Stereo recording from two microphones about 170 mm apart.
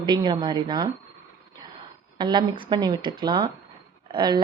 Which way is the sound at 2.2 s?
25° right (ahead or behind).